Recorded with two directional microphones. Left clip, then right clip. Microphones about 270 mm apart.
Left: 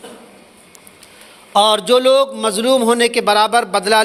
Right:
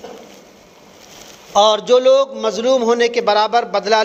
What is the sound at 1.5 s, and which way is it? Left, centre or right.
A man's voice, left.